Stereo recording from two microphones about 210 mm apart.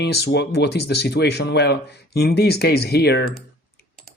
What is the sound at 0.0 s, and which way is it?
Speech, 50° left (ahead or behind).